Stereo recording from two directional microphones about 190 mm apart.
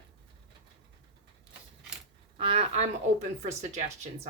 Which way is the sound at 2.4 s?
30° right (ahead or behind).